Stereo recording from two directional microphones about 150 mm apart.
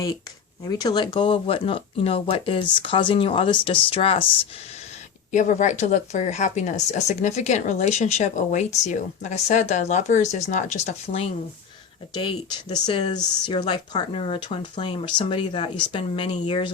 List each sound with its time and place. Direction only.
0.6 s speech: 25° left (ahead or behind)
5.3 s speech: 55° left (ahead or behind)
12.1 s speech: 30° left (ahead or behind)